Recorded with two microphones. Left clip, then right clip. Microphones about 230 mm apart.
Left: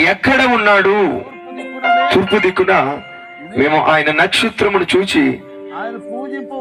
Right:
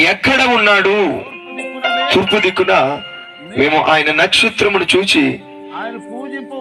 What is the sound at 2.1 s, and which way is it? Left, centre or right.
Speech, left.